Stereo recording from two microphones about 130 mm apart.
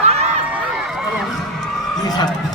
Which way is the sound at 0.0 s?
55° right (ahead or behind).